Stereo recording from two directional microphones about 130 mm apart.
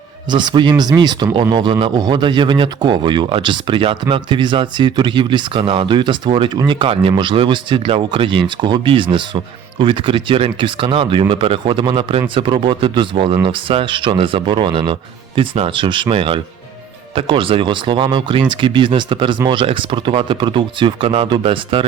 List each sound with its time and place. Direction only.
0.3 s speech: 35° right (ahead or behind)